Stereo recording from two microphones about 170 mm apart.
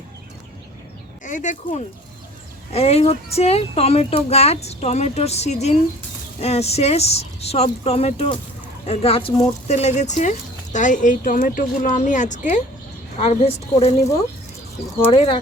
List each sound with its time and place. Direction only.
1.2 s speech: 45° left (ahead or behind)
15.0 s speech: 35° left (ahead or behind)